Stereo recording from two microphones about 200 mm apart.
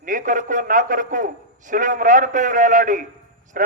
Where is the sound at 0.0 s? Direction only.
40° right (ahead or behind).